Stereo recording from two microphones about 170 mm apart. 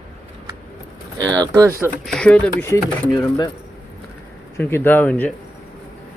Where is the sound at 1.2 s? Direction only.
25° right (ahead or behind).